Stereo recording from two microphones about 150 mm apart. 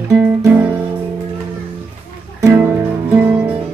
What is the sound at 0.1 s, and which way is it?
Guitar, 15° right (ahead or behind).